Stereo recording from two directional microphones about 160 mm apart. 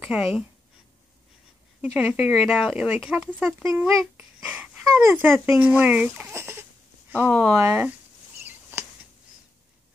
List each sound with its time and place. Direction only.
0.0 s speech: 5° right (ahead or behind)
2.0 s speech: 10° right (ahead or behind)